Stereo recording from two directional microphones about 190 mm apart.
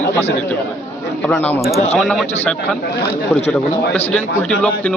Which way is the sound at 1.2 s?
10° left (ahead or behind).